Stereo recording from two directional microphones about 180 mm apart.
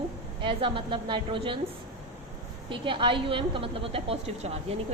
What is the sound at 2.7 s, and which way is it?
A woman's voice, 25° right (ahead or behind).